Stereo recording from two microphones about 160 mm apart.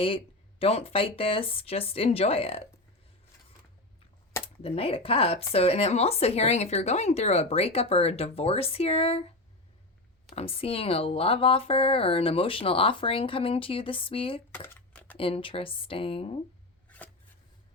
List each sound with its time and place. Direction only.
0.6 s speech: 40° left (ahead or behind)
4.6 s speech: 35° left (ahead or behind)
10.3 s speech: 35° left (ahead or behind)
14.5 s a sound: 15° left (ahead or behind)
15.2 s speech: 35° left (ahead or behind)